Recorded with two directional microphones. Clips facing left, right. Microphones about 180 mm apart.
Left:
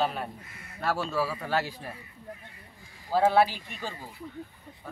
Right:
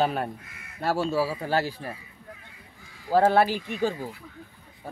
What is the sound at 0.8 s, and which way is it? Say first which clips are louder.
Speech: right 4 dB; 30° right (ahead or behind).